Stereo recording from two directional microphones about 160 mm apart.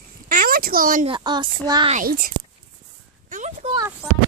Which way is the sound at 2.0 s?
70° right (ahead or behind).